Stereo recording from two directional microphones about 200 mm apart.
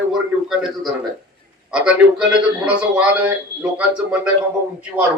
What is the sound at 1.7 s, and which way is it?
A man's voice, 5° right (ahead or behind).